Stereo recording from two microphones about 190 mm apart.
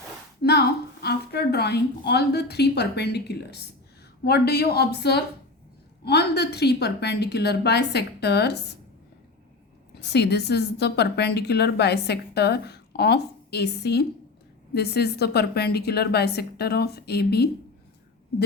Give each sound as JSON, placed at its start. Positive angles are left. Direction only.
{"t": 0.4, "sound": "a sound", "side_deg": 55}
{"t": 1.0, "sound": "a woman's voice", "side_deg": 60}
{"t": 9.9, "sound": "a woman's voice", "side_deg": 60}